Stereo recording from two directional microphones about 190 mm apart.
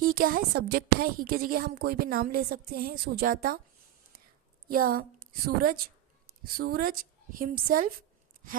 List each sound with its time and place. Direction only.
0.0 s a woman's voice: 50° right (ahead or behind)
4.7 s a woman's voice: 50° right (ahead or behind)